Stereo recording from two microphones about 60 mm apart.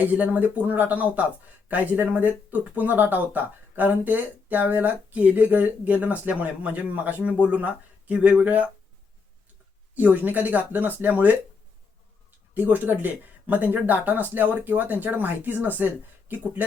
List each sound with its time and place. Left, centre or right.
0.0 s speech: right
9.9 s speech: right
12.5 s speech: right